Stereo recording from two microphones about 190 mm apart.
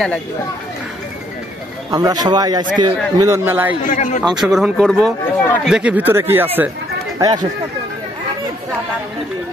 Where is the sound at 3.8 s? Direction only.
45° left (ahead or behind).